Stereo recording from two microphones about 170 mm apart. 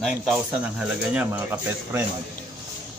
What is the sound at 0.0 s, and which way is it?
Speech, 5° right (ahead or behind).